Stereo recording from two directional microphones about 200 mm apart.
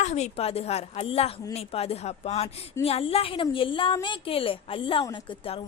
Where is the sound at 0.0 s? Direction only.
35° left (ahead or behind).